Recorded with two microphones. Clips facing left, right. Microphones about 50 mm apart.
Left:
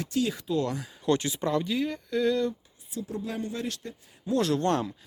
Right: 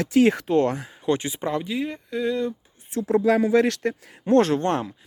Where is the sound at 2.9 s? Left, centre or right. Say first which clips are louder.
Right 14 dB; right.